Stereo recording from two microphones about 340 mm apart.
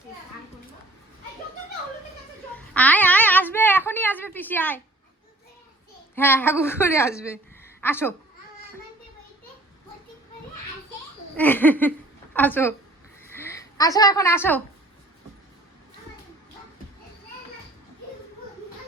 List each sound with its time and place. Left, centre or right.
2.6 s babbling: centre
6.1 s a woman's voice: centre
11.3 s speech: centre
13.3 s a sound: centre